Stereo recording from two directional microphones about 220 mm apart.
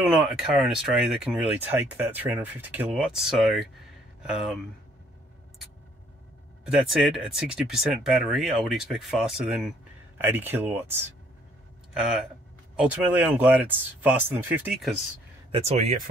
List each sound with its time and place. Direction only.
0.1 s speech: centre (ahead or behind)
6.6 s speech: centre (ahead or behind)
15.5 s speech: 25° right (ahead or behind)